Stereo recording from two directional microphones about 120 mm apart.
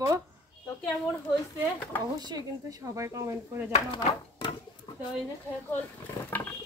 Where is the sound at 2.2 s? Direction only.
35° right (ahead or behind).